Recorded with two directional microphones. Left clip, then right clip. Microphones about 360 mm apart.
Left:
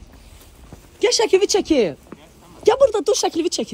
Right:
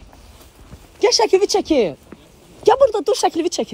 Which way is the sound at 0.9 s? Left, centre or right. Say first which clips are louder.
Right 2 dB; centre.